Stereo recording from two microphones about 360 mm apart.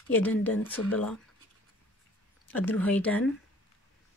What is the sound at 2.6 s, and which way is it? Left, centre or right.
Speech, centre.